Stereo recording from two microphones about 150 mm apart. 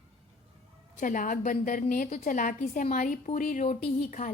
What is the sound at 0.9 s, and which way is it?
A woman's voice, 60° left (ahead or behind).